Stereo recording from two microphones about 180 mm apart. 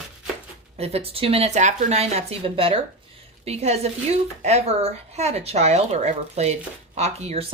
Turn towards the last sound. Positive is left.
turn(degrees=-35)  # may be behind; listen again after turning